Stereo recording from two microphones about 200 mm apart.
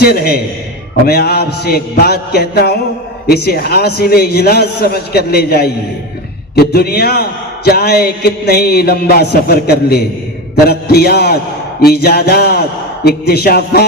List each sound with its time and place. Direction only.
0.0 s a man's voice: 50° left (ahead or behind)